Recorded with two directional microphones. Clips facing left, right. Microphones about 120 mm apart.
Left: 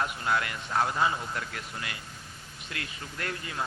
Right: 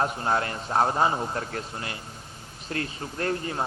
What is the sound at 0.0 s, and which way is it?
A man's voice, 35° right (ahead or behind).